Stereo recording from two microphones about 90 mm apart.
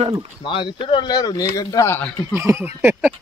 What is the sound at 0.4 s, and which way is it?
Speech, 65° left (ahead or behind).